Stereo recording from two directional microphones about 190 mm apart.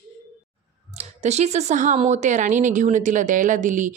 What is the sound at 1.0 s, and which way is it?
Speech, 35° right (ahead or behind).